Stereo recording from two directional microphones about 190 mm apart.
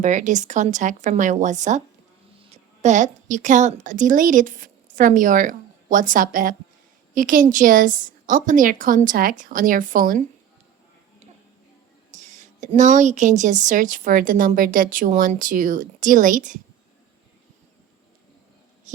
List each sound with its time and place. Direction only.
0.0 s a woman's voice: 40° right (ahead or behind)
12.1 s speech: 40° right (ahead or behind)